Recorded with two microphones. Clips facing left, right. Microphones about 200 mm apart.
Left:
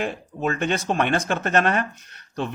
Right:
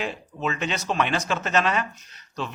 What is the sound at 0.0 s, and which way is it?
Speech, 50° left (ahead or behind).